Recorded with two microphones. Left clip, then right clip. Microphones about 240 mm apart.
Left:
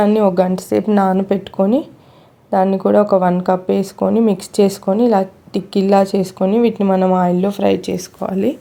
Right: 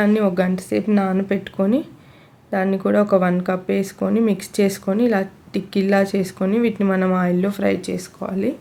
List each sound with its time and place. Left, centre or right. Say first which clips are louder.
0.0 s speech: left 5 dB; centre
1.1 s speech: left 5 dB; centre